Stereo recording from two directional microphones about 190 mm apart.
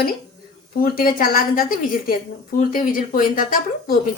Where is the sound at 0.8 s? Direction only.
50° left (ahead or behind).